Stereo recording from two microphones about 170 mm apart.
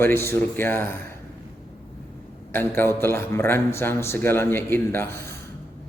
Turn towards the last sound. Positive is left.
turn(degrees=15)  # may be behind; listen again after turning